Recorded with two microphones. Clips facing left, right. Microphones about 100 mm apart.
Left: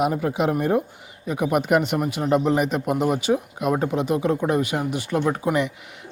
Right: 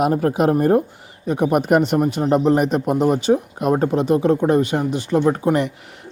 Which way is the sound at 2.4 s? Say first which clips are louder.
Right 4 dB; 35° right (ahead or behind).